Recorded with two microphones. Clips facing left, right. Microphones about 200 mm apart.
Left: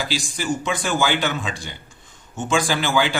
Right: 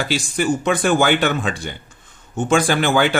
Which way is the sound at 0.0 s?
60° right (ahead or behind).